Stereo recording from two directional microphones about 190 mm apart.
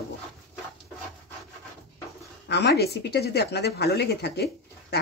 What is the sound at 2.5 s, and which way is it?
Speech, 60° left (ahead or behind).